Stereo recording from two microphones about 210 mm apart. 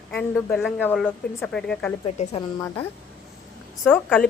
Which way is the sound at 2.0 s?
30° left (ahead or behind).